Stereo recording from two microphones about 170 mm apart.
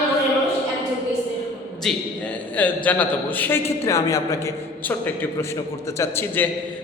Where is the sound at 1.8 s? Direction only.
Centre (ahead or behind).